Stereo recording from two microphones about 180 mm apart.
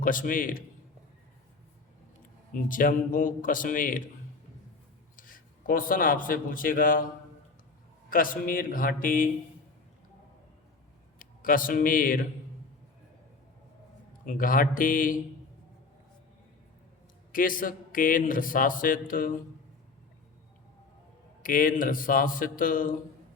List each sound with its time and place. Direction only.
0.0 s a man's voice: 50° left (ahead or behind)
2.5 s a man's voice: 50° left (ahead or behind)
5.1 s a man's voice: 50° left (ahead or behind)
8.1 s a man's voice: 50° left (ahead or behind)
11.2 s speech: 50° left (ahead or behind)
14.3 s a man's voice: 50° left (ahead or behind)
17.3 s a man's voice: 50° left (ahead or behind)
21.4 s a man's voice: 50° left (ahead or behind)